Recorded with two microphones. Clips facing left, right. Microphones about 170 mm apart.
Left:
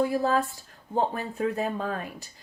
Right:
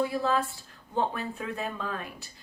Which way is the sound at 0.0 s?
45° left (ahead or behind).